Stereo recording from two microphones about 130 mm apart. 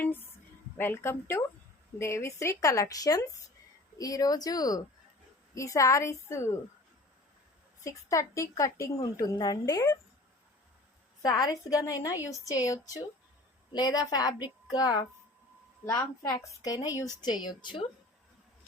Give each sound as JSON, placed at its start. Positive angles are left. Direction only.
{"t": 0.0, "sound": "a sound", "side_deg": 15}
{"t": 0.8, "sound": "a woman's voice", "side_deg": 20}
{"t": 7.9, "sound": "a woman's voice", "side_deg": 25}
{"t": 11.2, "sound": "a woman's voice", "side_deg": 30}